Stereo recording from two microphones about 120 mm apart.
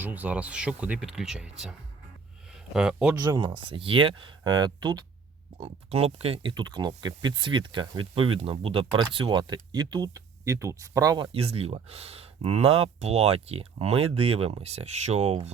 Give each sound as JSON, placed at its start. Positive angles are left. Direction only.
{"t": 0.0, "sound": "speech", "side_deg": -15}
{"t": 3.2, "sound": "speech", "side_deg": -35}
{"t": 5.5, "sound": "speech", "side_deg": -55}
{"t": 6.5, "sound": "speech", "side_deg": -40}
{"t": 11.3, "sound": "speech", "side_deg": -55}